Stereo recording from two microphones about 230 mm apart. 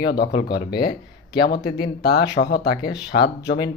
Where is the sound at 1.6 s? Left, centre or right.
Left.